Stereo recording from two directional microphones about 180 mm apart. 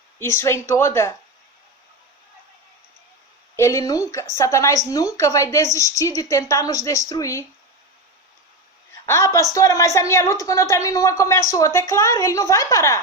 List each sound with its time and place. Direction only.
0.2 s a woman's voice: 15° left (ahead or behind)
3.5 s a woman's voice: 15° left (ahead or behind)
9.0 s a woman's voice: 15° left (ahead or behind)